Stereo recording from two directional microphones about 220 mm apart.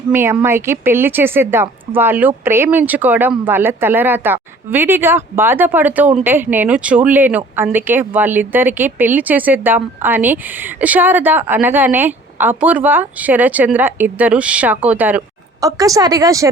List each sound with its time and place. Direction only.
0.1 s speech: 10° right (ahead or behind)